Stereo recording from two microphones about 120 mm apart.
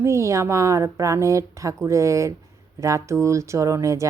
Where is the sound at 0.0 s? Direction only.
25° right (ahead or behind).